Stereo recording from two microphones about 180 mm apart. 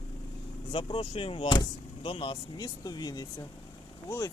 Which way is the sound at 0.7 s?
25° left (ahead or behind).